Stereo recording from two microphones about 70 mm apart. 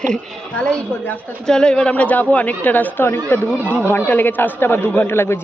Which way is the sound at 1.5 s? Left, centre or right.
Centre.